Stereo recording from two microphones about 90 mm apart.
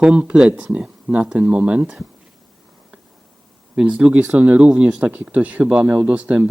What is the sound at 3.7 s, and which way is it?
Speech, 15° right (ahead or behind).